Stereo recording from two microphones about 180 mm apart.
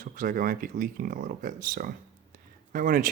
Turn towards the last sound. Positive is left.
turn(degrees=-50)  # may be behind; listen again after turning